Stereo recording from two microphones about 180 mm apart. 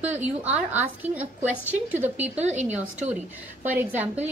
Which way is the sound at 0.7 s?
10° right (ahead or behind).